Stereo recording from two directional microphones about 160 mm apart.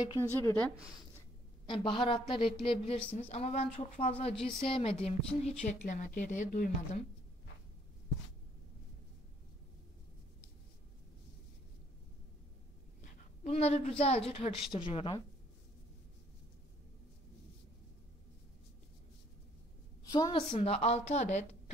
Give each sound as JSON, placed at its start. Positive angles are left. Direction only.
{"t": 0.0, "sound": "a woman's voice", "side_deg": 25}
{"t": 1.7, "sound": "a woman's voice", "side_deg": 35}
{"t": 13.4, "sound": "a woman's voice", "side_deg": 40}
{"t": 20.1, "sound": "a woman's voice", "side_deg": 25}
{"t": 20.5, "sound": "a woman's voice", "side_deg": 40}